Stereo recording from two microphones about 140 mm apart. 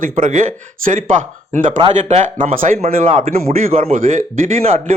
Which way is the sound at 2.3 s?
75° right (ahead or behind).